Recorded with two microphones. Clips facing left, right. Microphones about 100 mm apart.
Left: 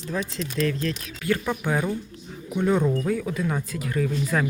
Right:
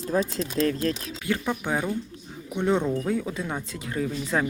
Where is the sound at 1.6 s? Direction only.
20° right (ahead or behind).